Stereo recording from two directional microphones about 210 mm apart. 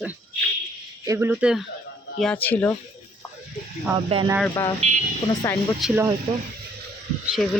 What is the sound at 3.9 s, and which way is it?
Speech, 20° right (ahead or behind).